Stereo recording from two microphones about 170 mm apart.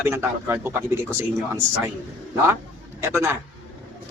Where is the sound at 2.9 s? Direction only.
15° right (ahead or behind).